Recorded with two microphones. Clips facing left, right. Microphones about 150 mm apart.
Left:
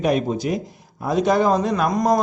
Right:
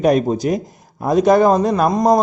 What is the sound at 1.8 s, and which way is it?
Speech, 25° right (ahead or behind).